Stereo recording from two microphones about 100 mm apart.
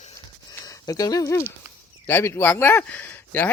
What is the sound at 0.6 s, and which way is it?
Speech, 35° left (ahead or behind).